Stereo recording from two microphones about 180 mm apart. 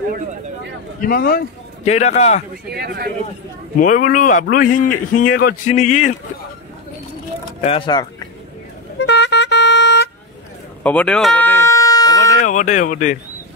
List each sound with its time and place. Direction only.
1.0 s a man's voice: 55° left (ahead or behind)
1.9 s a man's voice: 40° left (ahead or behind)
2.7 s a man's voice: 60° right (ahead or behind)
3.8 s a man's voice: 45° left (ahead or behind)
5.7 s a man's voice: 40° left (ahead or behind)
7.4 s a sound: 30° left (ahead or behind)
9.0 s music: 75° left (ahead or behind)
10.8 s bleat: 10° left (ahead or behind)
12.2 s speech: 45° left (ahead or behind)